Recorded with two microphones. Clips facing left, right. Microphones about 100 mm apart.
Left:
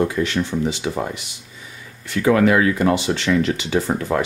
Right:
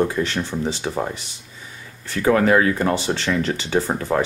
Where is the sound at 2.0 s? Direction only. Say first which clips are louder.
Left 2 dB; 35° right (ahead or behind).